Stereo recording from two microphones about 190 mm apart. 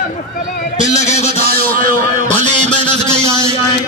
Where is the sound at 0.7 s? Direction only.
40° left (ahead or behind).